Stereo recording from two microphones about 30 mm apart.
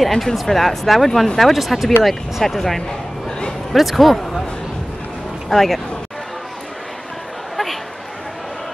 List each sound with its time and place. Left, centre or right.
0.1 s speech: centre
1.4 s speech: centre
2.9 s a sound: left
3.7 s speech: centre
5.5 s speech: centre